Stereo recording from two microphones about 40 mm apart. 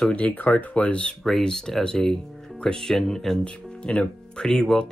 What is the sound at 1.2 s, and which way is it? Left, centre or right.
Speech, centre.